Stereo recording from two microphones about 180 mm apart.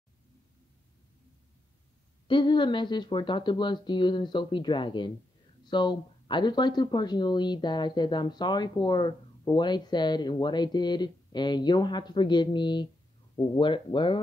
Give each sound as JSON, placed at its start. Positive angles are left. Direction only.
{"t": 2.2, "sound": "speech", "side_deg": 25}